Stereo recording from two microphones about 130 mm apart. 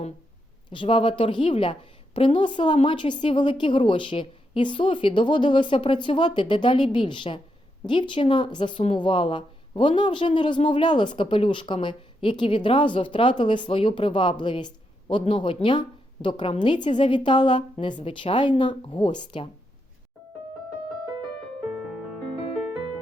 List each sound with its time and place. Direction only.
0.7 s a woman's voice: 40° left (ahead or behind)